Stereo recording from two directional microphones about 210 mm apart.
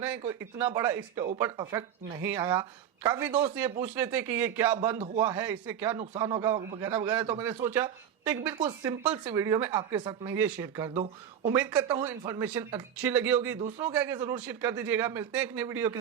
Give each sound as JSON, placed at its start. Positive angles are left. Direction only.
{"t": 0.3, "sound": "a man's voice", "side_deg": -15}
{"t": 4.9, "sound": "a man's voice", "side_deg": -30}
{"t": 5.4, "sound": "a man's voice", "side_deg": -10}
{"t": 8.5, "sound": "a man's voice", "side_deg": -20}
{"t": 10.2, "sound": "a man's voice", "side_deg": -10}
{"t": 10.9, "sound": "speech", "side_deg": -30}
{"t": 11.5, "sound": "a man's voice", "side_deg": -5}
{"t": 11.8, "sound": "a man's voice", "side_deg": -20}
{"t": 13.6, "sound": "speech", "side_deg": -30}
{"t": 13.8, "sound": "a man's voice", "side_deg": -10}